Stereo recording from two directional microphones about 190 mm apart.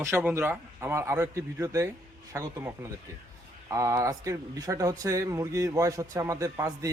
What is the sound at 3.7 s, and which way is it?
Speech, 15° right (ahead or behind).